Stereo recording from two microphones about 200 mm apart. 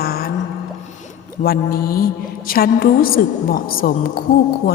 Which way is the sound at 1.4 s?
50° left (ahead or behind).